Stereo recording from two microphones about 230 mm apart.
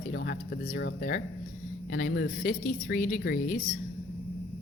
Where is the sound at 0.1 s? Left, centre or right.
Left.